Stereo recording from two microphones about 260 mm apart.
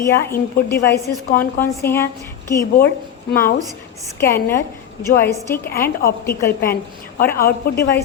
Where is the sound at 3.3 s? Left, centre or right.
Left.